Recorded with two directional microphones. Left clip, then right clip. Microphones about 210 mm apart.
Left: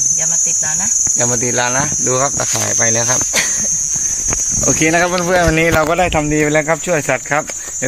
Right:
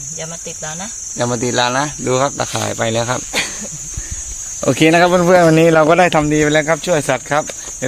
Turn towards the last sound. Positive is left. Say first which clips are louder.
# even
turn(degrees=-5)  # may be behind; listen again after turning